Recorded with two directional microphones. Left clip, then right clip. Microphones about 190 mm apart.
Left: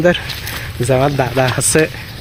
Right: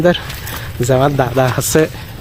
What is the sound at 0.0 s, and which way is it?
Speech, 5° right (ahead or behind).